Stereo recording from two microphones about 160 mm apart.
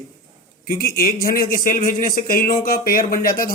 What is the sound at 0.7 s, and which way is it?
A man's voice, 65° left (ahead or behind).